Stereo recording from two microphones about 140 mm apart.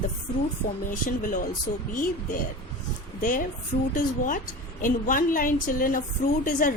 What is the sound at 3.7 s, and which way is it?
Speech, 90° left.